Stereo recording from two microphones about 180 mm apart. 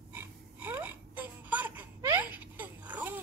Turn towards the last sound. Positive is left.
turn(degrees=-10)  # may be behind; listen again after turning